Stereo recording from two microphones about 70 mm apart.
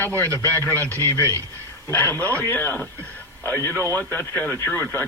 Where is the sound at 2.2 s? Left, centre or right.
Left.